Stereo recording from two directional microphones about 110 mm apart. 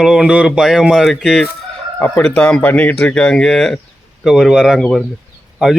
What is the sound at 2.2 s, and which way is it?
Speech, 5° left (ahead or behind).